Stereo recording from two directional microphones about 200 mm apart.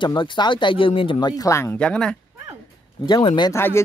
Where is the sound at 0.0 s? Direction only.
25° left (ahead or behind); by 2.1 s 5° left (ahead or behind).